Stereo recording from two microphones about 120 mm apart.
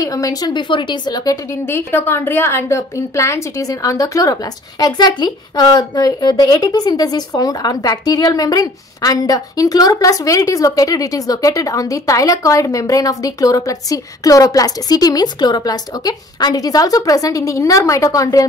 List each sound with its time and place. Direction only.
0.0 s a woman's voice: 30° left (ahead or behind)